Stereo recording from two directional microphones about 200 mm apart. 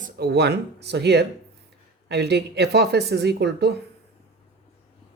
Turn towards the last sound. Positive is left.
turn(degrees=-55)  # may be behind; listen again after turning